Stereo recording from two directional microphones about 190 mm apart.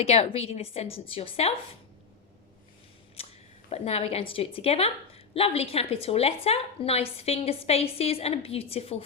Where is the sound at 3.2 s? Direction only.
30° left (ahead or behind).